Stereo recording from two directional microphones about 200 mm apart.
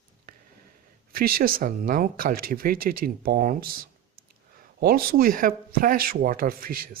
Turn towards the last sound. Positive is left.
turn(degrees=-45)  # may be behind; listen again after turning